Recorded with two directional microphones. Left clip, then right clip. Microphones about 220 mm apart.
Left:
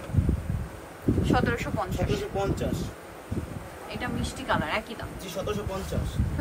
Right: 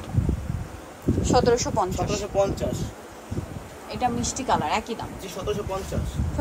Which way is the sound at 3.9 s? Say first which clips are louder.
Right 8 dB; 20° right (ahead or behind).